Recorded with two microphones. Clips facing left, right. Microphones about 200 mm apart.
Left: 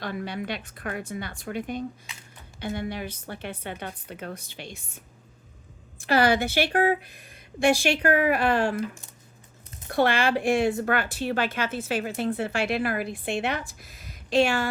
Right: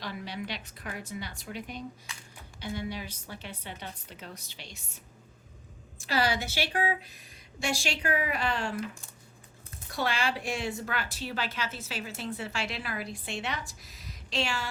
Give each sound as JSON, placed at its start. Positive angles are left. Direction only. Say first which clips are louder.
{"t": 0.0, "sound": "a woman's voice", "louder": "left 6 dB", "side_deg": 55}
{"t": 6.0, "sound": "speech", "louder": "left 7 dB", "side_deg": 55}
{"t": 9.9, "sound": "speech", "louder": "left 8 dB", "side_deg": 55}